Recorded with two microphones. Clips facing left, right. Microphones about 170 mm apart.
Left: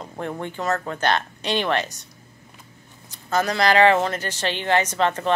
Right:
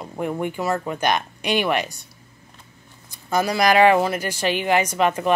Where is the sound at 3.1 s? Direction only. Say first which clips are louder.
Right 1 dB; 10° right (ahead or behind).